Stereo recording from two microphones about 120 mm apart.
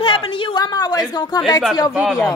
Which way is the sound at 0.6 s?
35° left (ahead or behind).